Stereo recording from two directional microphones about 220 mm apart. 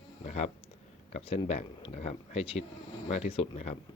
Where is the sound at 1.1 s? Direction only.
30° left (ahead or behind).